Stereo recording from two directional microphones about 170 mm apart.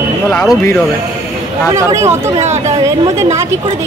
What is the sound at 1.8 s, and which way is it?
Speech, 15° right (ahead or behind).